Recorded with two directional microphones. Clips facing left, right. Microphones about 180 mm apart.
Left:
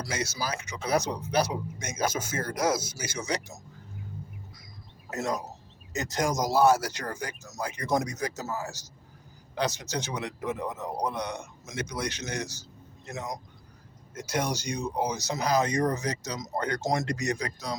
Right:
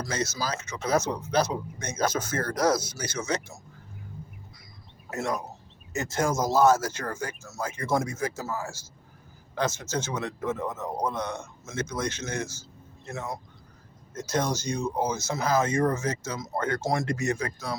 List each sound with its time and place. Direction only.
0.0 s speech: 10° left (ahead or behind)
5.1 s speech: 20° left (ahead or behind)